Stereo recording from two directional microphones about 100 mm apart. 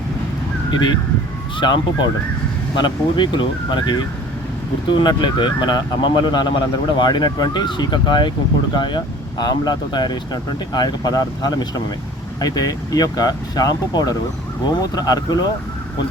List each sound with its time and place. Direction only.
0.7 s speech: 45° left (ahead or behind)